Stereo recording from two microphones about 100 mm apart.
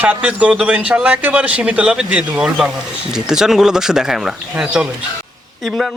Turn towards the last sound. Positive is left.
turn(degrees=-10)  # may be behind; listen again after turning